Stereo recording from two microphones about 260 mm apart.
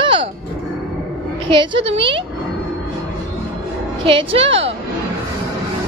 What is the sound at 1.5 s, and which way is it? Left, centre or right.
Speech, centre.